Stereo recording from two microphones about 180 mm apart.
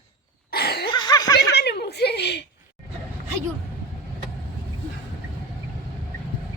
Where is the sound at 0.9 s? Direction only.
25° left (ahead or behind).